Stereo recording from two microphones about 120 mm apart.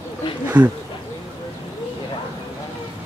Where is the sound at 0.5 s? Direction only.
35° right (ahead or behind).